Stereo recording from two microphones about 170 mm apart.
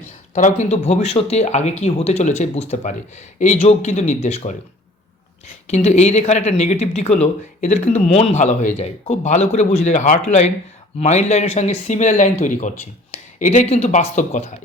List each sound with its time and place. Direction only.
0.3 s speech: 45° left (ahead or behind)
5.6 s speech: 40° left (ahead or behind)